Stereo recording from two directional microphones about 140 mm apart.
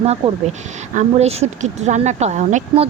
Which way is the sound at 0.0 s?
50° right (ahead or behind).